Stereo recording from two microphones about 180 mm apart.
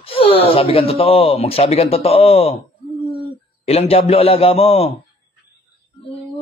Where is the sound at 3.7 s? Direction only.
35° left (ahead or behind).